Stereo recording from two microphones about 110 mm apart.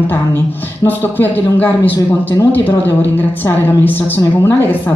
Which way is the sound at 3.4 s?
20° left (ahead or behind).